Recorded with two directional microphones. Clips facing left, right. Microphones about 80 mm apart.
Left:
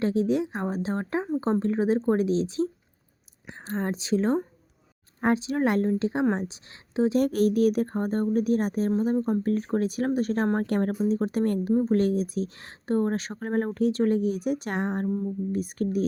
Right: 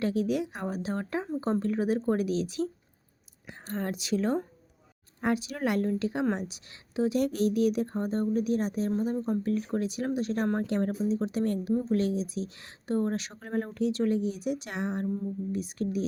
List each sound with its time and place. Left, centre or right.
0.0 s a woman's voice: left
7.3 s a woman's voice: left
10.6 s speech: left